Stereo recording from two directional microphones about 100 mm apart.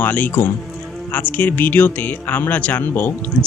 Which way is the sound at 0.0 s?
20° left (ahead or behind).